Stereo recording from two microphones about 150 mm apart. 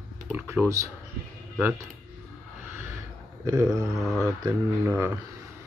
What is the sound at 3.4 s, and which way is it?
Speech, 20° right (ahead or behind).